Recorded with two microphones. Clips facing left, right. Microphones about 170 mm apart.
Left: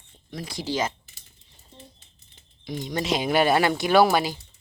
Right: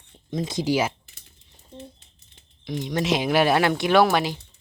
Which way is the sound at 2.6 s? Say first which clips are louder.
Right 3 dB; centre (ahead or behind).